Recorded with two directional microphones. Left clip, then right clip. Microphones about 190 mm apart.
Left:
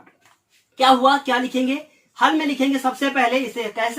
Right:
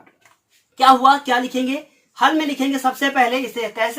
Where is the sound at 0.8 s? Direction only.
25° right (ahead or behind).